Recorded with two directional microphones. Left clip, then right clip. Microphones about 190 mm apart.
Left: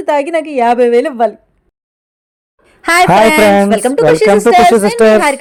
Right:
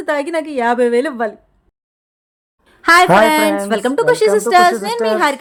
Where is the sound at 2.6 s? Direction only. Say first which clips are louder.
Even; 15° left (ahead or behind).